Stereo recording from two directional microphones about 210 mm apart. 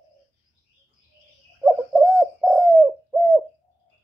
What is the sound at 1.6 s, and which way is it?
Bird, 5° right (ahead or behind).